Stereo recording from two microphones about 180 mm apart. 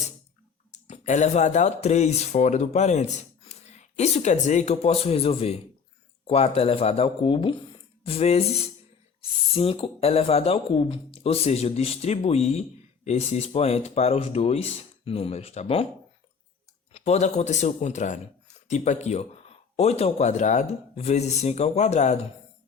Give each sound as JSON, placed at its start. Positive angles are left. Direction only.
{"t": 0.7, "sound": "speech", "side_deg": 40}
{"t": 16.9, "sound": "speech", "side_deg": 40}